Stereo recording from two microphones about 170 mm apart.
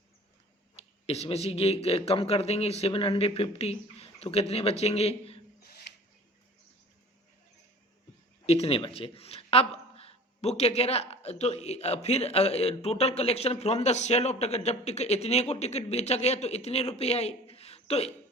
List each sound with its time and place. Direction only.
0.8 s speech: 40° left (ahead or behind)
8.4 s speech: 35° left (ahead or behind)